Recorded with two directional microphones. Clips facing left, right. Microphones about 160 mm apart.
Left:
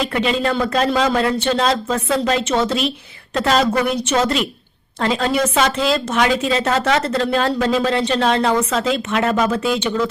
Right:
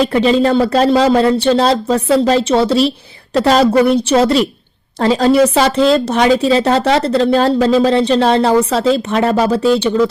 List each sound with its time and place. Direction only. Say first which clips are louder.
0.1 s speech: right 7 dB; 35° right (ahead or behind)